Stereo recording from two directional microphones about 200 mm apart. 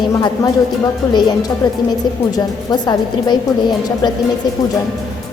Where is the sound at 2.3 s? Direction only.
20° left (ahead or behind).